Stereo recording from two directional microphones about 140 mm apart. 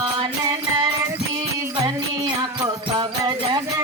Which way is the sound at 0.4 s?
25° right (ahead or behind).